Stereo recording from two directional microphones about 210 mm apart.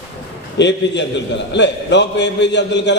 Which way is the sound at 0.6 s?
55° left (ahead or behind).